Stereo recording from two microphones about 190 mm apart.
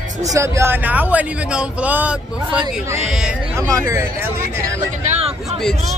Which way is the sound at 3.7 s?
15° right (ahead or behind).